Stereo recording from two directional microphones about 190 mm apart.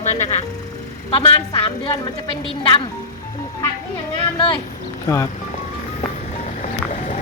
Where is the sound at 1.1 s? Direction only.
30° left (ahead or behind).